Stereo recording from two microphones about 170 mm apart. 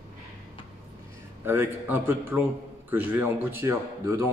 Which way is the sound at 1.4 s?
15° right (ahead or behind).